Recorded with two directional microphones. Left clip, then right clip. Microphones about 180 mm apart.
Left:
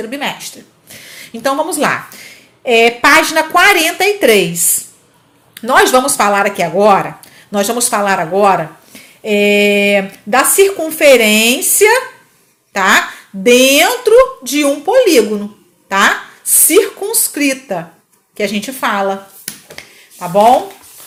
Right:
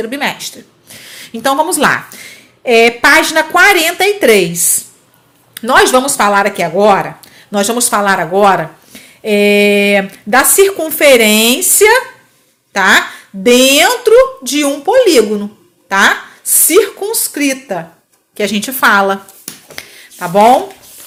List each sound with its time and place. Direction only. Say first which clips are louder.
0.0 s a woman's voice: right 3 dB; 25° right (ahead or behind)
0.9 s speech: right 1 dB; 10° right (ahead or behind)
18.3 s a woman's voice: right 3 dB; 20° right (ahead or behind)
19.7 s a sound: right 4 dB; 25° right (ahead or behind)